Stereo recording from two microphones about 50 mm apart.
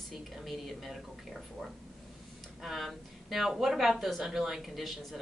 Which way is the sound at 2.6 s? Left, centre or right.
Centre.